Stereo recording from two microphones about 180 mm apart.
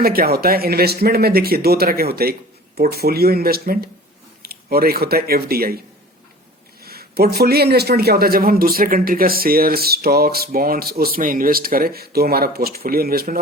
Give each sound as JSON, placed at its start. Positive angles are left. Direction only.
{"t": 0.0, "sound": "a man's voice", "side_deg": -55}
{"t": 6.8, "sound": "a man's voice", "side_deg": -60}